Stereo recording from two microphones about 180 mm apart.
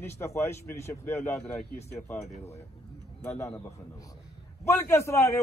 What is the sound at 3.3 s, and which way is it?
Speech, 15° left (ahead or behind).